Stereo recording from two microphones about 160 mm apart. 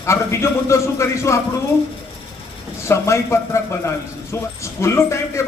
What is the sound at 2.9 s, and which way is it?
A man's voice, 15° left (ahead or behind).